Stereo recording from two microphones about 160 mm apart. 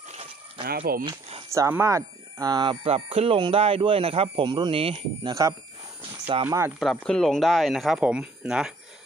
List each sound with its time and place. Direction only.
0.1 s a sound: 40° right (ahead or behind)
0.7 s speech: 70° right (ahead or behind)
1.5 s speech: 20° right (ahead or behind); by 5.3 s 35° right (ahead or behind)
6.4 s speech: 15° right (ahead or behind)
6.8 s speech: 5° left (ahead or behind)